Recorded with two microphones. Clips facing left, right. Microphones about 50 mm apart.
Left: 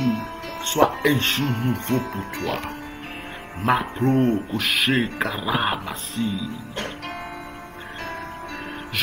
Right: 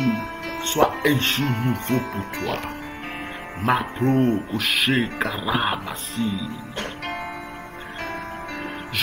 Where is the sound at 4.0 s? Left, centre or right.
Right.